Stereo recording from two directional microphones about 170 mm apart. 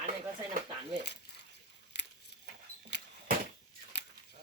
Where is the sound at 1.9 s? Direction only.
90° left.